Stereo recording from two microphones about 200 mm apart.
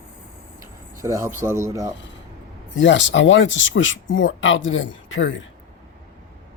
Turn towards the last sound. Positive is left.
turn(degrees=70)  # may be behind; listen again after turning